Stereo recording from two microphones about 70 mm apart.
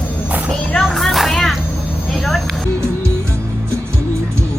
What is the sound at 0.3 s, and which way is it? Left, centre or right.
Music, right.